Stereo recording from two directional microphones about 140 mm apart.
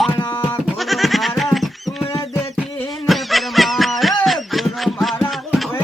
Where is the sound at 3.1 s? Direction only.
Centre (ahead or behind).